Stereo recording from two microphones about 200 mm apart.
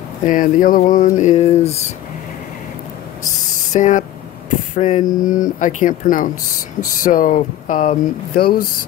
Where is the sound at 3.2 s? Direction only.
35° left (ahead or behind).